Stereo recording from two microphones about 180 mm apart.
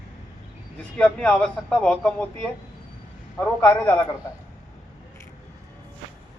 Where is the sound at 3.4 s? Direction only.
10° left (ahead or behind).